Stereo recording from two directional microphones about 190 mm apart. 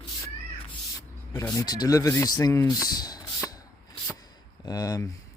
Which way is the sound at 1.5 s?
20° left (ahead or behind).